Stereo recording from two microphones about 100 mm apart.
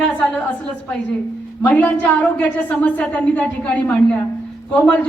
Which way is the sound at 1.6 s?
15° left (ahead or behind).